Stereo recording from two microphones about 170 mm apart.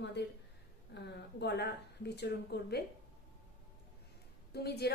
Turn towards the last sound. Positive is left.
turn(degrees=70)  # may be behind; listen again after turning